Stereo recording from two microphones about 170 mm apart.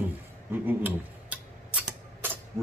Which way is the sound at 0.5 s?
10° right (ahead or behind).